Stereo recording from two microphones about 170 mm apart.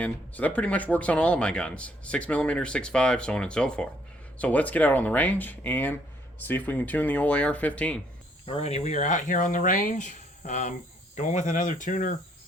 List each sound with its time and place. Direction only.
0.0 s speech: 10° left (ahead or behind)
8.4 s speech: 40° left (ahead or behind)